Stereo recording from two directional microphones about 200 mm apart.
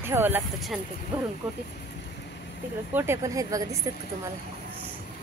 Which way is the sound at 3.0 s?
15° right (ahead or behind).